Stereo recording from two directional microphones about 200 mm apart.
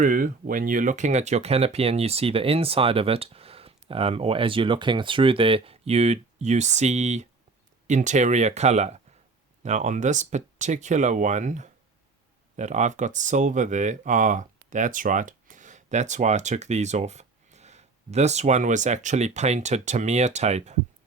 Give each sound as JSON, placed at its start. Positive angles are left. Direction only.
{"t": 0.0, "sound": "speech", "side_deg": -45}